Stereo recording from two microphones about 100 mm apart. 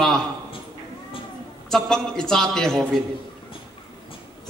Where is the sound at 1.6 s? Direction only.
5° left (ahead or behind).